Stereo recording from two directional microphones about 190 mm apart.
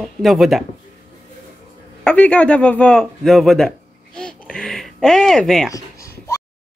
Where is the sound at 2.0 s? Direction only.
5° left (ahead or behind).